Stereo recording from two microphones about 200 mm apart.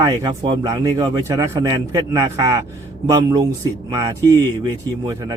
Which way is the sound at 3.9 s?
20° right (ahead or behind).